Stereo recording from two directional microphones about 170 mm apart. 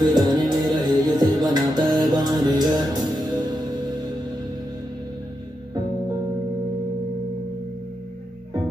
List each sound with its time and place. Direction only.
0.0 s music: 25° right (ahead or behind)